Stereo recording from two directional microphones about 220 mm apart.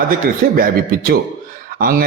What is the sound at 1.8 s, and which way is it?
Speech, 40° right (ahead or behind).